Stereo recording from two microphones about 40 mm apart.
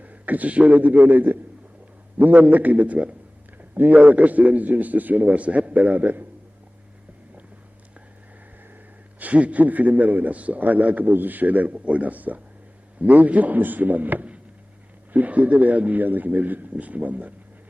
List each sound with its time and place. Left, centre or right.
0.0 s a man's voice: right
3.8 s a man's voice: right
9.1 s a man's voice: right